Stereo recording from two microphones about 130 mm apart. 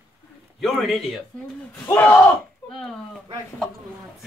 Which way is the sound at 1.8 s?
15° left (ahead or behind).